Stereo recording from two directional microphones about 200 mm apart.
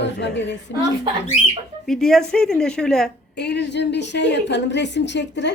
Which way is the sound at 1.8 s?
Centre (ahead or behind).